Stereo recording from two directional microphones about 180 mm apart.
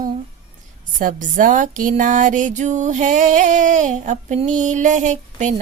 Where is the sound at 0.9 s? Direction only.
50° right (ahead or behind).